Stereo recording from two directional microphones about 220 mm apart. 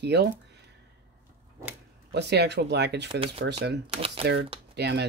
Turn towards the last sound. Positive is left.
turn(degrees=-50)  # may be behind; listen again after turning